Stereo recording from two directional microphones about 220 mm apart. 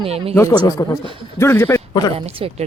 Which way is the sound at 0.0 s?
25° right (ahead or behind).